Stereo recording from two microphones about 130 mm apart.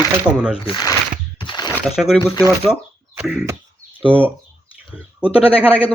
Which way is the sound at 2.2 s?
25° left (ahead or behind).